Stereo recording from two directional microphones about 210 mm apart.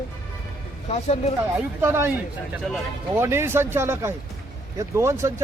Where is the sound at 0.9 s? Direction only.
30° left (ahead or behind).